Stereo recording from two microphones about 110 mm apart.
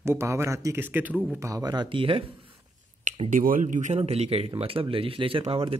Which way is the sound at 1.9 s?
55° right (ahead or behind).